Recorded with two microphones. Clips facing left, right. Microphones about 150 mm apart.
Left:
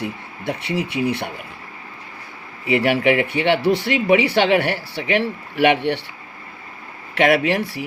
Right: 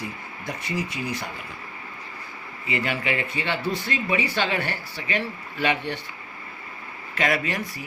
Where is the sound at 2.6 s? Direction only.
70° left (ahead or behind).